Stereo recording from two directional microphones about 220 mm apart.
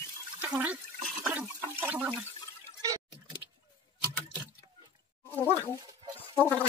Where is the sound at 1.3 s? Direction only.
5° right (ahead or behind).